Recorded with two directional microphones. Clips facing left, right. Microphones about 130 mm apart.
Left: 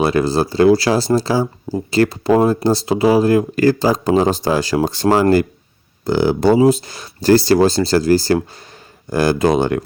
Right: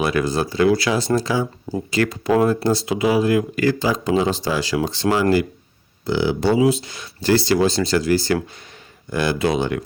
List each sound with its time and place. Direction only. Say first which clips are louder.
0.0 s speech: left 4 dB; 30° left (ahead or behind)